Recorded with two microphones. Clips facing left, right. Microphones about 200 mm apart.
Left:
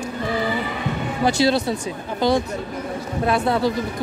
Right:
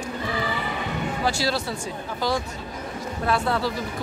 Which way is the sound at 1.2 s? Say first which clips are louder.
Left 9 dB; 20° left (ahead or behind).